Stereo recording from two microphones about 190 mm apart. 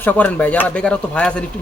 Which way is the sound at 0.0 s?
10° left (ahead or behind).